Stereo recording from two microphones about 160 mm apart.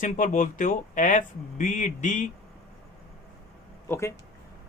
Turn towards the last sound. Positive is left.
turn(degrees=15)  # may be behind; listen again after turning